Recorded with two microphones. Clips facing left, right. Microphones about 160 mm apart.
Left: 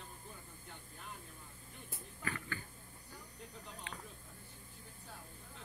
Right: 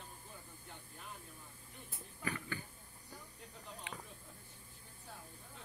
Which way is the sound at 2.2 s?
15° right (ahead or behind).